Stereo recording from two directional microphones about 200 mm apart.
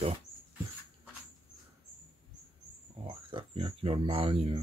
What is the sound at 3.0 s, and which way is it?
Speech, 25° right (ahead or behind).